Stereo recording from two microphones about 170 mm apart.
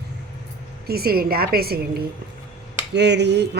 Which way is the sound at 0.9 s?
65° right (ahead or behind).